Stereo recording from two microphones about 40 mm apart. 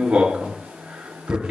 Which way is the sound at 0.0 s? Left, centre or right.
Centre.